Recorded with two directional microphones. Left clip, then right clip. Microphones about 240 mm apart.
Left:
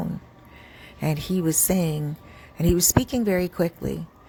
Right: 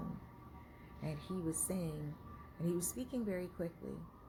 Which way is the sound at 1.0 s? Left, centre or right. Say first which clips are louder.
Left 17 dB; left.